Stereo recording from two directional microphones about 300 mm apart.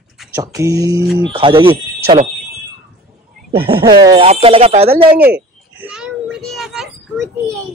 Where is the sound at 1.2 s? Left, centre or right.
Centre.